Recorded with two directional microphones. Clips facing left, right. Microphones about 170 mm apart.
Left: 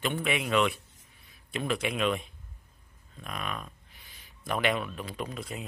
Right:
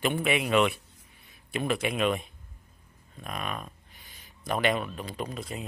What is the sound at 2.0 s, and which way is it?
Speech, 45° right (ahead or behind).